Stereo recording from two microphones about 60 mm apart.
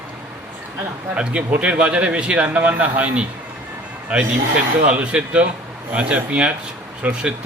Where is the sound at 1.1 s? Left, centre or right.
Centre.